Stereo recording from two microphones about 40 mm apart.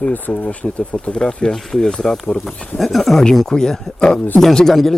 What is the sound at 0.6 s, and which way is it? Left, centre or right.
Speech, left.